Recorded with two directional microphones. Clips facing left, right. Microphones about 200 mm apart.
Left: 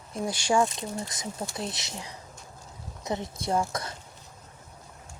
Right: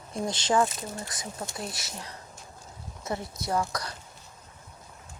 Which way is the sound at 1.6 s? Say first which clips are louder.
Left 2 dB; 20° left (ahead or behind).